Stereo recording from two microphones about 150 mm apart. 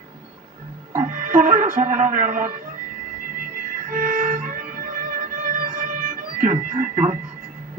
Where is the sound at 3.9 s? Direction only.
60° right (ahead or behind).